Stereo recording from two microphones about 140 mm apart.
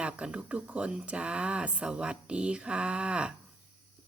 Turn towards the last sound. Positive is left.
turn(degrees=-5)  # may be behind; listen again after turning